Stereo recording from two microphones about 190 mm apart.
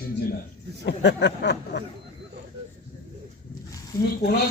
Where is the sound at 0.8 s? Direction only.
65° left (ahead or behind).